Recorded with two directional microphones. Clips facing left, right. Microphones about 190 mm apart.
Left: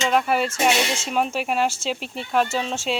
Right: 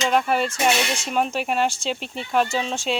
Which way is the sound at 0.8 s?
25° left (ahead or behind).